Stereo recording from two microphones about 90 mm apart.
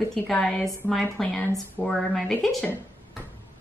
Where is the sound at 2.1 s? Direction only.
5° left (ahead or behind).